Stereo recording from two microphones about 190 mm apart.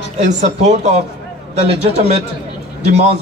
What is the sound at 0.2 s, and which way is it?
A man's voice, 40° right (ahead or behind).